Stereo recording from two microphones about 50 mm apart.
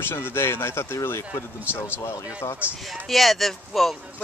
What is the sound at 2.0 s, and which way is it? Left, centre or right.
Speech, left.